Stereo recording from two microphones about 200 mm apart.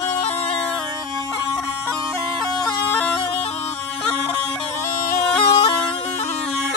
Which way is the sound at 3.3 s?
30° left (ahead or behind).